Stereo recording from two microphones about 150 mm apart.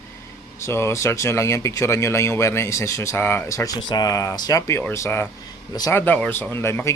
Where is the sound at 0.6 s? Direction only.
15° left (ahead or behind).